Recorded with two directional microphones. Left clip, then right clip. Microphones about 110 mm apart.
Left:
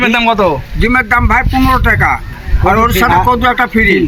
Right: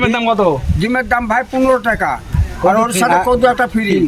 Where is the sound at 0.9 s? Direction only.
30° right (ahead or behind).